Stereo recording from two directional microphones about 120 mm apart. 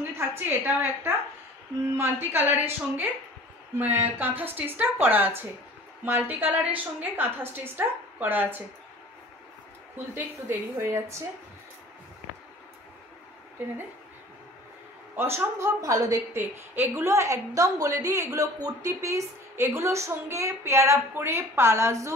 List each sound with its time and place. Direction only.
0.3 s a woman's voice: 20° right (ahead or behind)
10.1 s a woman's voice: 20° right (ahead or behind)
15.1 s a woman's voice: 20° right (ahead or behind)